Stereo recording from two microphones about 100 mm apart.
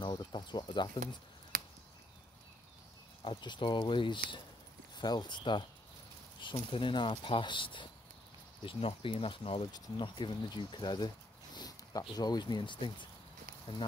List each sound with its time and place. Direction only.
0.0 s chicken: 50° left (ahead or behind)
3.3 s speech: 50° left (ahead or behind)
6.4 s speech: 60° left (ahead or behind)
8.6 s speech: 70° left (ahead or behind)
9.7 s speech: 50° left (ahead or behind)
11.5 s a sound: 40° left (ahead or behind)
12.2 s speech: 45° left (ahead or behind)